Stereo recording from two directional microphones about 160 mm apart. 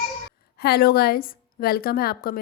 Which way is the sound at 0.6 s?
75° left (ahead or behind).